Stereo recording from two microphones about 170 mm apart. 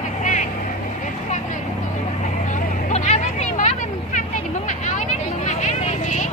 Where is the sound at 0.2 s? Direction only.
45° left (ahead or behind).